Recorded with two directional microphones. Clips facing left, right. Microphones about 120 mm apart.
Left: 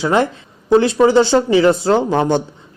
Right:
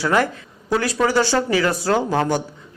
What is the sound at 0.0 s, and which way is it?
Speech, 20° left (ahead or behind).